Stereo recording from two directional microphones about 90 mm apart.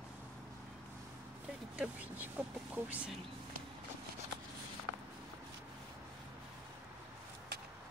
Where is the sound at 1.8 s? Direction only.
15° right (ahead or behind).